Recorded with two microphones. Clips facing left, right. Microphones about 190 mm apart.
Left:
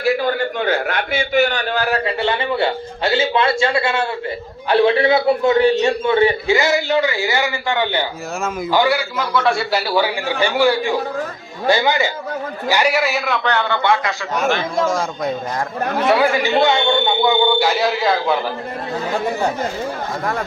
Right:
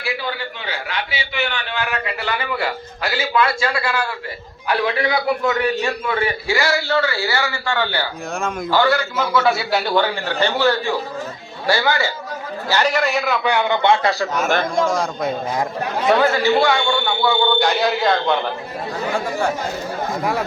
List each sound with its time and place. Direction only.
0.0 s a man's voice: 45° left (ahead or behind); by 9.0 s 10° left (ahead or behind)
9.1 s a man's voice: centre (ahead or behind); by 14.3 s 35° right (ahead or behind)
14.8 s a man's voice: centre (ahead or behind)